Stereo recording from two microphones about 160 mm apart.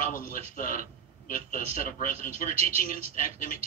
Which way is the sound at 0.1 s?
60° left (ahead or behind).